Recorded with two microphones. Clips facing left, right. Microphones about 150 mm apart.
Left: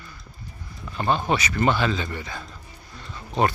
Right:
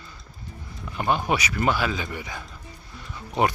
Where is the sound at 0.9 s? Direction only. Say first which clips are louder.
Left 1 dB; 15° right (ahead or behind).